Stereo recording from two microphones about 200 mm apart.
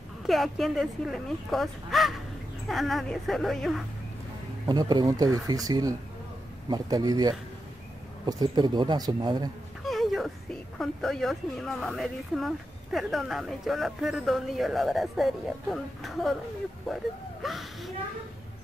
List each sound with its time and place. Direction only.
0.3 s speech: centre (ahead or behind)
4.6 s speech: 20° right (ahead or behind)
9.8 s speech: centre (ahead or behind)